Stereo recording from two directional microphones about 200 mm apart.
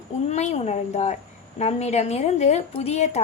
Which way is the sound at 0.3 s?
35° left (ahead or behind).